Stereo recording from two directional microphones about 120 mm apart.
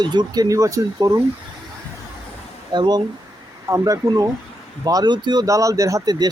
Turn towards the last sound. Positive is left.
turn(degrees=-35)  # may be behind; listen again after turning